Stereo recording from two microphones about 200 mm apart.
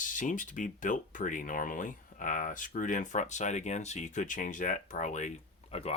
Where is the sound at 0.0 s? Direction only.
40° left (ahead or behind).